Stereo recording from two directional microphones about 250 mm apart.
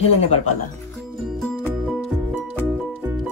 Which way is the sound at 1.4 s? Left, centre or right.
Centre.